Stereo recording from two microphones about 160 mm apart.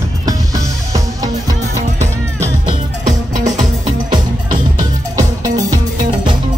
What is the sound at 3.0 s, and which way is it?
Music, 50° right (ahead or behind).